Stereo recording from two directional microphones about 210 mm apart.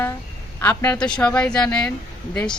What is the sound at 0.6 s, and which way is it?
A woman's voice, 10° left (ahead or behind).